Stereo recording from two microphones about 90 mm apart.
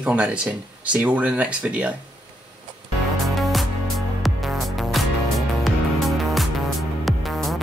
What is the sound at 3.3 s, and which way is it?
Music, centre (ahead or behind).